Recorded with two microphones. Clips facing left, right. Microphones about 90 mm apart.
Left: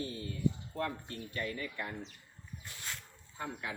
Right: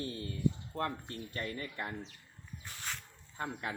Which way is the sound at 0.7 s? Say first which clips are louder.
Right 1 dB; 40° right (ahead or behind).